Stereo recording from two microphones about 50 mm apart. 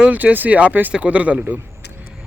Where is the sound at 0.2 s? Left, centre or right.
Right.